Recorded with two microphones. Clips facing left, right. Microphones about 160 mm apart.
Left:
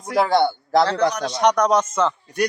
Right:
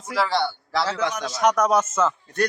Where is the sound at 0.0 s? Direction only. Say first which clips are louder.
Left 6 dB; 50° left (ahead or behind).